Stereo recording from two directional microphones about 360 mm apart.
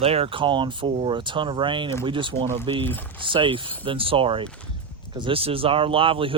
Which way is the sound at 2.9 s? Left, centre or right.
Centre.